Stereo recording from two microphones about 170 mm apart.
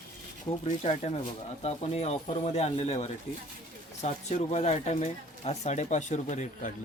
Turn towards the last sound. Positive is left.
turn(degrees=45)  # may be behind; listen again after turning